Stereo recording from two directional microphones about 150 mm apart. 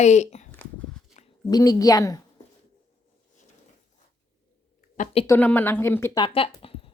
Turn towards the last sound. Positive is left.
turn(degrees=35)  # may be behind; listen again after turning